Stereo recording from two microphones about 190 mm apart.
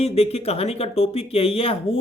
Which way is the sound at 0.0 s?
35° left (ahead or behind).